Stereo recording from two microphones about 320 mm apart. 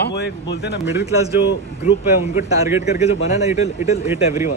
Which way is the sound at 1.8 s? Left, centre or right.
Left.